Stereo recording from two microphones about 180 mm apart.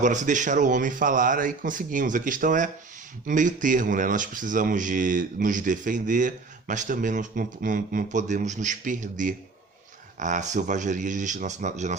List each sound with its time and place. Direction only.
0.0 s speech: 45° right (ahead or behind)